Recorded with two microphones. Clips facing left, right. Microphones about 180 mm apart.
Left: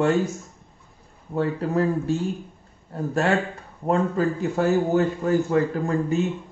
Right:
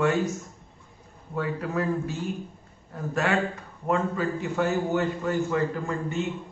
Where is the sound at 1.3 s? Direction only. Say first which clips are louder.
Left 5 dB; 30° left (ahead or behind).